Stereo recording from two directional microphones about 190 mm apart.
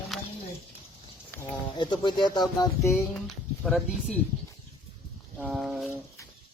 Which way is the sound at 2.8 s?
Centre (ahead or behind).